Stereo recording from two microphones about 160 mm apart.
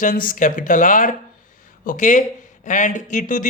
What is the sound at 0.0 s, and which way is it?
Speech, 60° left (ahead or behind).